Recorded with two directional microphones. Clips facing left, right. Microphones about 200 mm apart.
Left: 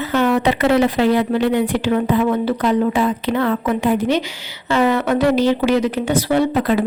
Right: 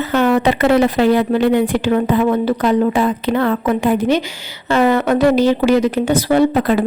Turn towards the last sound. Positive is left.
turn(degrees=-50)  # may be behind; listen again after turning